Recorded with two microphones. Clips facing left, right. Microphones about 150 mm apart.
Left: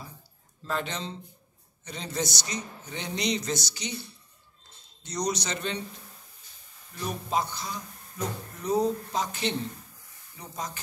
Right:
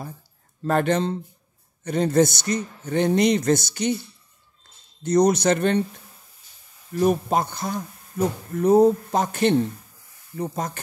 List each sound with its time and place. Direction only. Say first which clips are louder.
0.7 s speech: right 12 dB; 55° right (ahead or behind)
5.0 s speech: right 13 dB; 55° right (ahead or behind)
6.9 s speech: right 11 dB; 55° right (ahead or behind)